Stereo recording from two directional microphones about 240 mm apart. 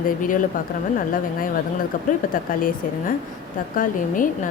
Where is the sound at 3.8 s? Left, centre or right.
Left.